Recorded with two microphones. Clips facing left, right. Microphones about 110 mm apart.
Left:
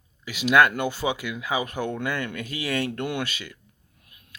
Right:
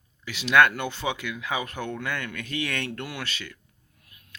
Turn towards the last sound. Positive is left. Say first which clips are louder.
# left 6 dB
turn(degrees=15)  # may be behind; listen again after turning